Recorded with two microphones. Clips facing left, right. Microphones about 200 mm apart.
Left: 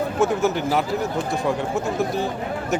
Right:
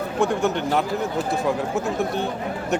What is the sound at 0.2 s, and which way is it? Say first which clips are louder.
Speech: even; centre (ahead or behind).